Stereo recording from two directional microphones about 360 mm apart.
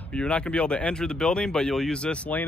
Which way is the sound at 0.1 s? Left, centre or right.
Centre.